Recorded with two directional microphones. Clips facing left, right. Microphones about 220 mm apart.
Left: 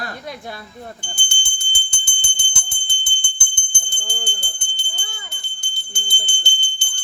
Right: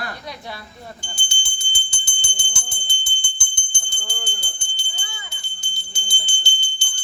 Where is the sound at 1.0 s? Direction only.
55° left (ahead or behind).